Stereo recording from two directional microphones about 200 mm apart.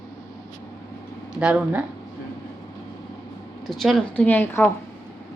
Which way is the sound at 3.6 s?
Centre (ahead or behind).